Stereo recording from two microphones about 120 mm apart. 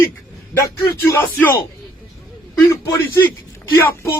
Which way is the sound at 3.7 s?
25° left (ahead or behind).